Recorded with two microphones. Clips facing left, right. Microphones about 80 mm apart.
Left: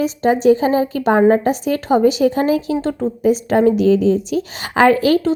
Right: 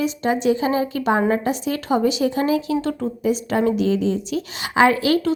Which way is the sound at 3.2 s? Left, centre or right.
Left.